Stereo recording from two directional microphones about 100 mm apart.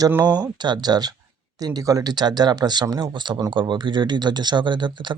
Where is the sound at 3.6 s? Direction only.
50° right (ahead or behind).